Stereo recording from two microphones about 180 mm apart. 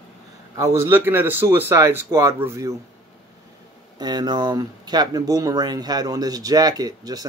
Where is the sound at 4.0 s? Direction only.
20° right (ahead or behind).